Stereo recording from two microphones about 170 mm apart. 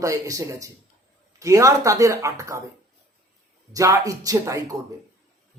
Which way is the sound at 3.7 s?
20° right (ahead or behind).